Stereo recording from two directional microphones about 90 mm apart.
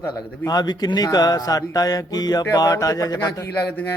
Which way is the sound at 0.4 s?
50° left (ahead or behind).